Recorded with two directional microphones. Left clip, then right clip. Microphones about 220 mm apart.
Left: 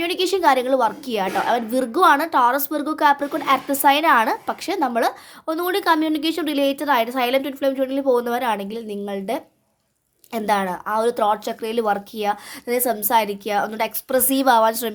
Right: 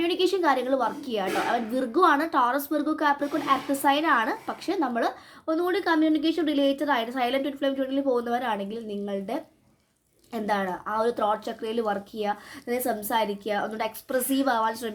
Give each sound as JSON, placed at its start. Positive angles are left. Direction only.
{"t": 0.0, "sound": "a woman's voice", "side_deg": 25}